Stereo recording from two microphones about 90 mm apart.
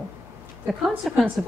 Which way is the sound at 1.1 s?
Centre (ahead or behind).